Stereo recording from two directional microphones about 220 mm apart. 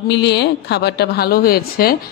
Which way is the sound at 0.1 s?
50° left (ahead or behind).